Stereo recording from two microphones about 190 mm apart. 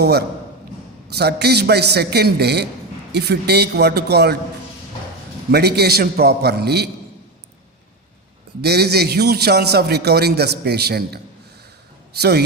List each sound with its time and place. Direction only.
0.0 s a man's voice: 60° right (ahead or behind)
5.5 s a man's voice: 60° right (ahead or behind)
8.6 s a man's voice: 55° right (ahead or behind)